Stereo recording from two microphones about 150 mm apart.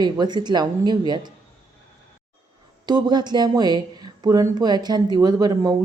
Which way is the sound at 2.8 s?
30° right (ahead or behind).